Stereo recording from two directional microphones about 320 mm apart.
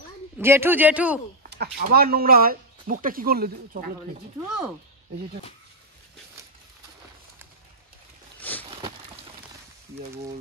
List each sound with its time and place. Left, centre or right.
0.4 s a man's voice: centre
1.5 s speech: right
8.4 s a sound: centre